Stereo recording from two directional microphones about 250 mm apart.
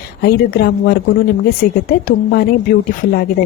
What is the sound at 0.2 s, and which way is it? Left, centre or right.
Speech, left.